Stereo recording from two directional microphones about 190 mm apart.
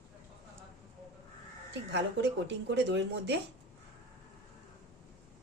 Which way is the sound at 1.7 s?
65° right (ahead or behind).